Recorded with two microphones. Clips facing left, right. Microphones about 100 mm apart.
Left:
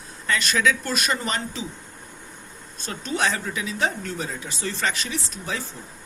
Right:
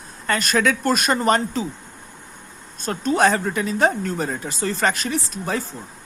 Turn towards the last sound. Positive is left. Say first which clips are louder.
# right 6 dB
turn(degrees=-45)  # may be behind; listen again after turning